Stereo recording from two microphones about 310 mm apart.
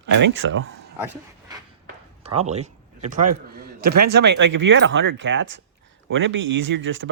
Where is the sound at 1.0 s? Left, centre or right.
Centre.